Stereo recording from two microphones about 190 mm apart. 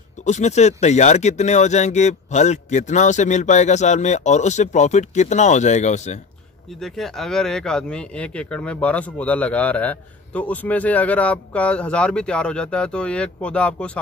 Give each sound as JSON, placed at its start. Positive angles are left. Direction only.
{"t": 0.2, "sound": "speech", "side_deg": 40}
{"t": 6.8, "sound": "speech", "side_deg": 0}